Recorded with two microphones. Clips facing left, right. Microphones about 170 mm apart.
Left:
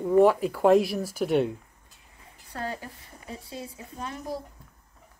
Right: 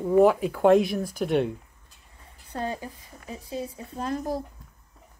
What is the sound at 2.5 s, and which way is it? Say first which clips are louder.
Speech: right 3 dB; 20° right (ahead or behind).